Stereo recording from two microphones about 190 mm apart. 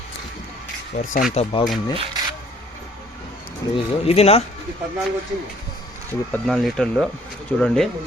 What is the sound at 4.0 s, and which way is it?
Speech, 30° left (ahead or behind).